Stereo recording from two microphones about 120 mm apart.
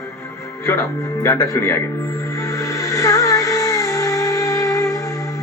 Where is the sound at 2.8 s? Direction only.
25° left (ahead or behind).